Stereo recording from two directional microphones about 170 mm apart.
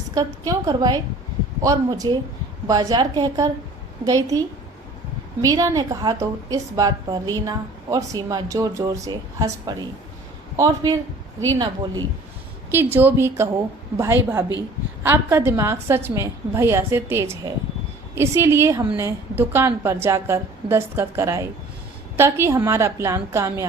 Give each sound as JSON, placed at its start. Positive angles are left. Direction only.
{"t": 0.1, "sound": "a woman's voice", "side_deg": -20}
{"t": 12.7, "sound": "a woman's voice", "side_deg": -15}